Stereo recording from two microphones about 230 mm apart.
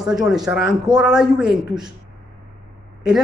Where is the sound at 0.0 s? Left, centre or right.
Centre.